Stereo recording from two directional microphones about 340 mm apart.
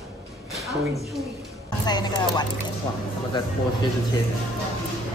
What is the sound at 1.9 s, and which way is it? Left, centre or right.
Speech, centre.